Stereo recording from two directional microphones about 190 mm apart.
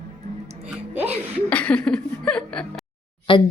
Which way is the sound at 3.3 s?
25° left (ahead or behind).